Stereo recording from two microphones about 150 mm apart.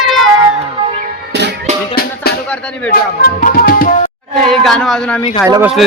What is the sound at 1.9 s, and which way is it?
Music, 90° left.